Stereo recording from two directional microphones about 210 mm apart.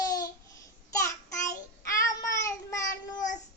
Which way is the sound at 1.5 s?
15° left (ahead or behind).